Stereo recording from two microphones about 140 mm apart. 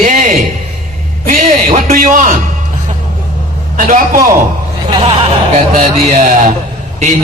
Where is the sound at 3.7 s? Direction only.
70° right (ahead or behind).